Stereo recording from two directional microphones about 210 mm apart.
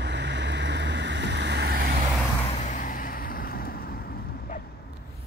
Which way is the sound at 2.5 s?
35° left (ahead or behind).